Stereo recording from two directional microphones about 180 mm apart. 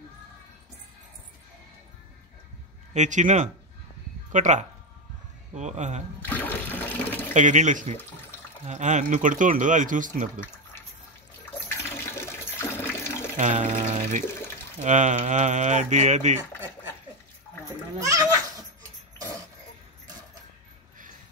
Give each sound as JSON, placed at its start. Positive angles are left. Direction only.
{"t": 2.9, "sound": "speech", "side_deg": -40}
{"t": 6.2, "sound": "water", "side_deg": 10}
{"t": 7.3, "sound": "speech", "side_deg": -40}
{"t": 11.7, "sound": "toilet flush", "side_deg": 15}
{"t": 13.4, "sound": "speech", "side_deg": -40}
{"t": 14.8, "sound": "speech", "side_deg": -40}
{"t": 17.9, "sound": "goat", "side_deg": -20}